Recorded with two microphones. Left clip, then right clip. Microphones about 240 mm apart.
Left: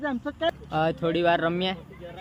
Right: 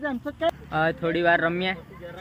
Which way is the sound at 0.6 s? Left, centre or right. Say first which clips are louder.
Right 1 dB; centre.